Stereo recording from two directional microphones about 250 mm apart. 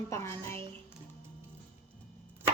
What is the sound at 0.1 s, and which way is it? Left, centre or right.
Speech, centre.